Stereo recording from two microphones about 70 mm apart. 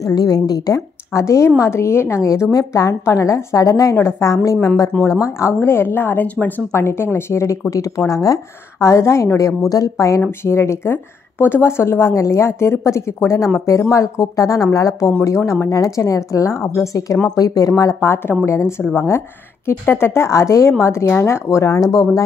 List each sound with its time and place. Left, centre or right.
0.1 s a woman's voice: left
1.1 s a woman's voice: left
2.5 s a woman's voice: left
3.9 s a woman's voice: left
6.7 s speech: left
8.1 s a woman's voice: left
8.7 s a woman's voice: left
9.7 s a woman's voice: left
18.0 s a woman's voice: left
21.7 s a woman's voice: left